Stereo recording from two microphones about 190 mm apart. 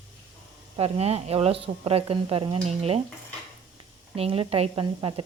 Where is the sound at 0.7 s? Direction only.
30° right (ahead or behind).